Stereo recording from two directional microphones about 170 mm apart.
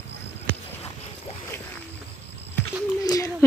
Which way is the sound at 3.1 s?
20° left (ahead or behind).